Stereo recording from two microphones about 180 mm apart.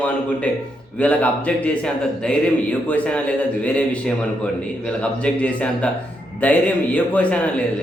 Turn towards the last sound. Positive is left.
turn(degrees=5)  # may be behind; listen again after turning